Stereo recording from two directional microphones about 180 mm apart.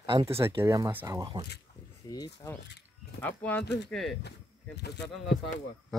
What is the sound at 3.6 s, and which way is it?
Speech, 70° left (ahead or behind).